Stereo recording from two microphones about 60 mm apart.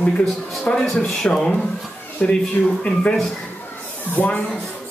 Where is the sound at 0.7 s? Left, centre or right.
Centre.